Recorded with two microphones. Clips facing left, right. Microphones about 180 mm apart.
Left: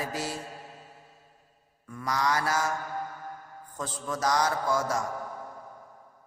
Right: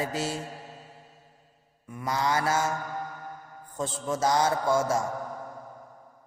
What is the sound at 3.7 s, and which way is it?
A man's voice, 25° right (ahead or behind).